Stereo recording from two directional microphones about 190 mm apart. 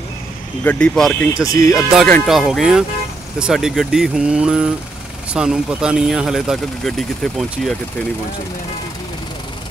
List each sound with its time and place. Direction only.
0.7 s speech: 5° left (ahead or behind)
1.3 s speech: 15° left (ahead or behind)
2.0 s speech: centre (ahead or behind)